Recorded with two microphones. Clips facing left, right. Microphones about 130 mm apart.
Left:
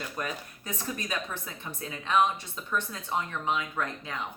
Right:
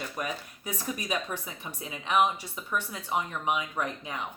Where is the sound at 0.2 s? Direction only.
10° right (ahead or behind).